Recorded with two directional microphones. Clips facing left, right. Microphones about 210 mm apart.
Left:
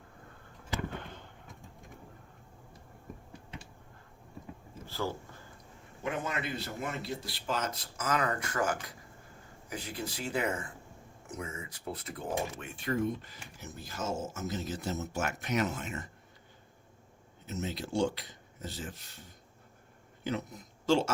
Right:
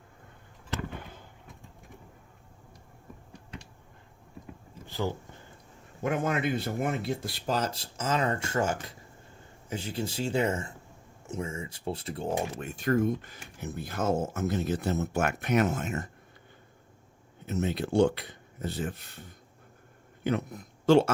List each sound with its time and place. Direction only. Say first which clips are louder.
4.9 s speech: right 4 dB; 20° right (ahead or behind)
6.0 s speech: right 7 dB; 45° right (ahead or behind); by 12.6 s 30° right (ahead or behind)
12.6 s speech: right 8 dB; 45° right (ahead or behind)
17.4 s speech: right 7 dB; 60° right (ahead or behind)
20.2 s a man's voice: right 6 dB; 55° right (ahead or behind)